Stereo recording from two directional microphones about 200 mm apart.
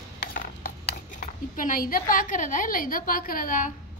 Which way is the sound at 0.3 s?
45° left (ahead or behind).